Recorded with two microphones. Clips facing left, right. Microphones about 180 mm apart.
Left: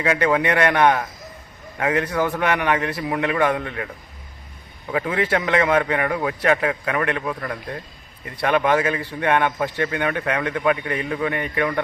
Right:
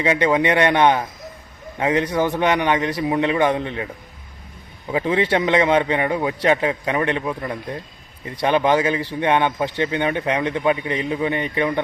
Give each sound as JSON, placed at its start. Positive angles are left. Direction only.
{"t": 0.0, "sound": "a man's voice", "side_deg": -20}
{"t": 4.9, "sound": "a man's voice", "side_deg": -20}